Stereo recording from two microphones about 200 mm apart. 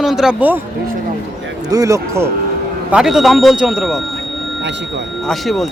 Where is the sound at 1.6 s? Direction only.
15° right (ahead or behind).